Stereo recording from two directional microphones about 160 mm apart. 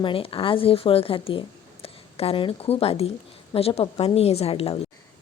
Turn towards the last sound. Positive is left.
turn(degrees=35)  # may be behind; listen again after turning